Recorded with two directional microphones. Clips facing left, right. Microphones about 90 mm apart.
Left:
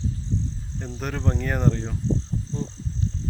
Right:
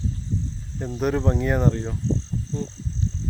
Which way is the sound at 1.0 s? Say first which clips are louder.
Right 6 dB; 5° right (ahead or behind).